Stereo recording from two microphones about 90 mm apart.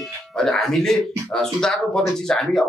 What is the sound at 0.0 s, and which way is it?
Music, 5° left (ahead or behind).